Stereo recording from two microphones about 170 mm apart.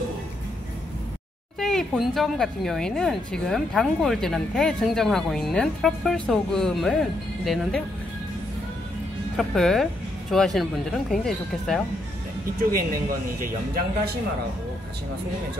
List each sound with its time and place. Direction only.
1.6 s speech: centre (ahead or behind)
9.4 s speech: centre (ahead or behind)
12.7 s speech: 55° right (ahead or behind)